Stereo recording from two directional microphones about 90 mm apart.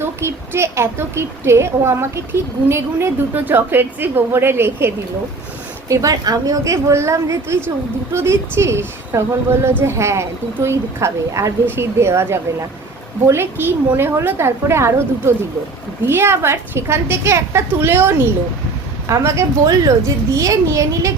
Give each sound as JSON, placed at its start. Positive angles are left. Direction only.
{"t": 0.0, "sound": "a woman's voice", "side_deg": -30}
{"t": 5.9, "sound": "a woman's voice", "side_deg": -40}